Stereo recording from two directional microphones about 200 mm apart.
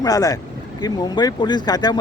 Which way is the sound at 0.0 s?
20° left (ahead or behind).